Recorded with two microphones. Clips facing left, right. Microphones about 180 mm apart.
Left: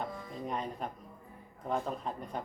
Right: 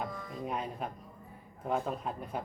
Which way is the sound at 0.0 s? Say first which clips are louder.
Right 1 dB; 5° right (ahead or behind).